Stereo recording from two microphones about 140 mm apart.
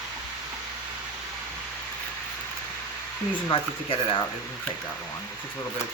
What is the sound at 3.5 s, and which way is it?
Speech, 40° left (ahead or behind).